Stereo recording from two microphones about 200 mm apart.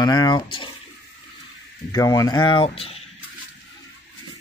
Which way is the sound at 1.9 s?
15° left (ahead or behind).